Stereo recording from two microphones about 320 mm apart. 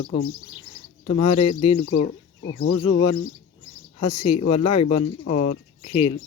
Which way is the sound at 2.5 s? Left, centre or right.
Left.